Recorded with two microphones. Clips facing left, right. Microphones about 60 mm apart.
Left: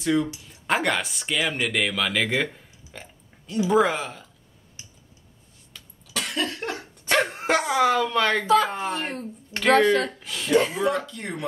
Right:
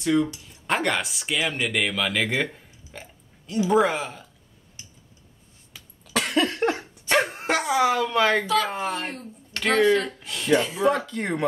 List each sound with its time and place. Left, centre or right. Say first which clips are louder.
0.0 s speech: right 1 dB; centre
5.7 s cough: even; centre
6.1 s cough: right 5 dB; right
7.1 s speech: left 1 dB; centre
9.0 s speech: left 2 dB; left
9.6 s speech: left 1 dB; centre
10.8 s speech: right 2 dB; centre
11.1 s speech: right 6 dB; right